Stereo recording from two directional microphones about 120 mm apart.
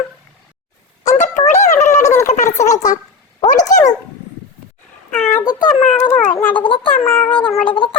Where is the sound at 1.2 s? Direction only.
80° left.